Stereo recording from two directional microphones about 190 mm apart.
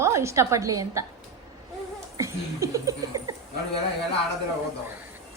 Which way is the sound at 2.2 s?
15° right (ahead or behind).